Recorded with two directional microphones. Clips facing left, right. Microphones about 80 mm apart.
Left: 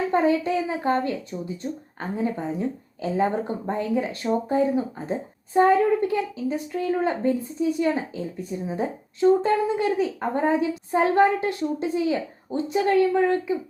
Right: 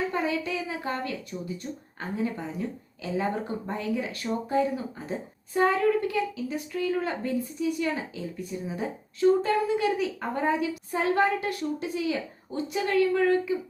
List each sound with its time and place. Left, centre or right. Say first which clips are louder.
0.1 s a woman's voice: left 8 dB; left